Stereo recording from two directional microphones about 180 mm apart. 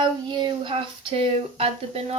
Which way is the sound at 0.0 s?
25° right (ahead or behind).